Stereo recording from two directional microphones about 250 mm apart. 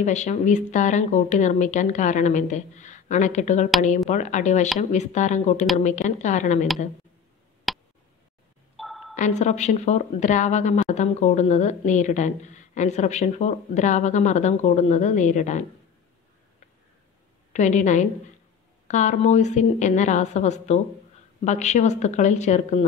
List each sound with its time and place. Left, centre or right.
0.0 s speech: left
7.7 s tick: centre
8.7 s a sound: centre
9.1 s speech: left
17.5 s a woman's voice: left